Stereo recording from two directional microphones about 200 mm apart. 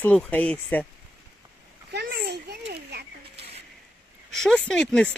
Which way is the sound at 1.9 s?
55° right (ahead or behind).